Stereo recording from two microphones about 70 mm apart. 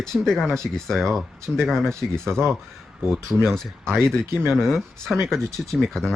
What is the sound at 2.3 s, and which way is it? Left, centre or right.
Speech, right.